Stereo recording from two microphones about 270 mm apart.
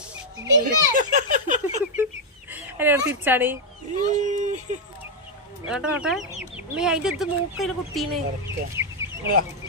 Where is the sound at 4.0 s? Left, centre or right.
Right.